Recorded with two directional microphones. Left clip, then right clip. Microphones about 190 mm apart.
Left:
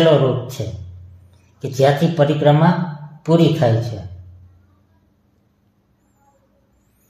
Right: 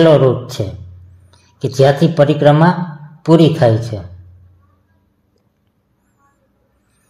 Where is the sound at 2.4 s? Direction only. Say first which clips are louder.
Right 4 dB; 50° right (ahead or behind).